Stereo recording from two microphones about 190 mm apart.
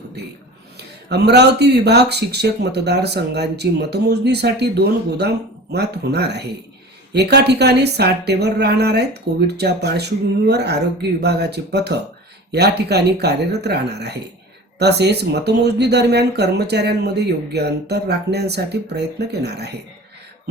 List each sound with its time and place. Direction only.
0.8 s speech: 60° right (ahead or behind)